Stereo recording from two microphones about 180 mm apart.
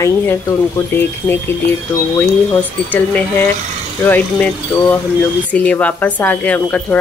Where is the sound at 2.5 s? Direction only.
10° left (ahead or behind).